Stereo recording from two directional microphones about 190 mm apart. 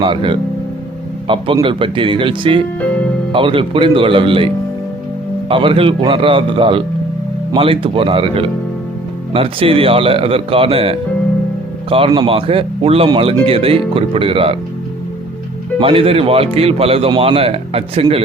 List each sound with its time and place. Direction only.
0.0 s a man's voice: 25° right (ahead or behind)
5.5 s a man's voice: 25° right (ahead or behind)
15.8 s speech: 30° right (ahead or behind)